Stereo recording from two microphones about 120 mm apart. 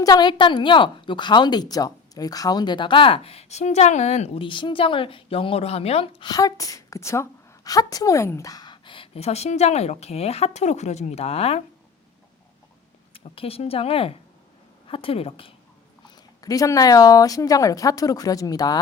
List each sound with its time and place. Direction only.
0.0 s a woman's voice: 35° left (ahead or behind); by 4.4 s 65° left (ahead or behind)
4.4 s a woman's voice: 45° left (ahead or behind)
6.2 s a woman's voice: 30° left (ahead or behind); by 11.6 s 60° left (ahead or behind)
13.1 s a woman's voice: 50° left (ahead or behind)
16.0 s speech: 30° left (ahead or behind)